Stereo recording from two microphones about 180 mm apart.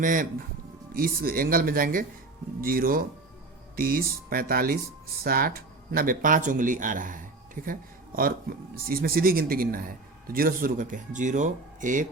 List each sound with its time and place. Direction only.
0.0 s speech: 45° right (ahead or behind)